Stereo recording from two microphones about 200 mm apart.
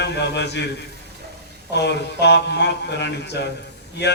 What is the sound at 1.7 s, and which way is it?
A man's voice, 60° left (ahead or behind).